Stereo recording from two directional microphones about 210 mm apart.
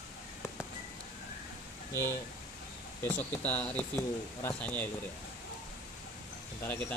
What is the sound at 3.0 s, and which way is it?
Speech, 10° left (ahead or behind).